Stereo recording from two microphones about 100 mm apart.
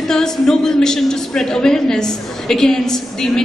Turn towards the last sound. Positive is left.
turn(degrees=5)  # may be behind; listen again after turning